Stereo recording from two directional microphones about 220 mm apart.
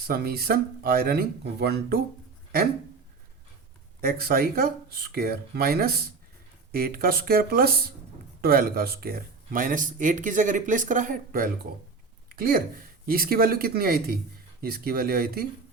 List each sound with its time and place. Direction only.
0.1 s speech: 45° right (ahead or behind)
4.0 s speech: 45° right (ahead or behind)